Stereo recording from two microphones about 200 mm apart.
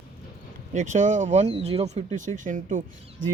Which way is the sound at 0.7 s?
35° right (ahead or behind).